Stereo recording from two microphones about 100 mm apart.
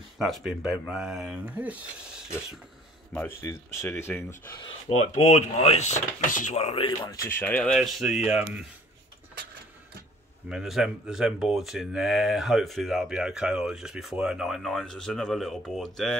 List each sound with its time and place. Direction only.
0.2 s speech: centre (ahead or behind)
1.4 s speech: 15° right (ahead or behind)
3.1 s speech: 15° left (ahead or behind)
4.8 s speech: 90° left
7.2 s speech: 20° left (ahead or behind)
7.7 s speech: centre (ahead or behind)
10.5 s speech: 5° right (ahead or behind)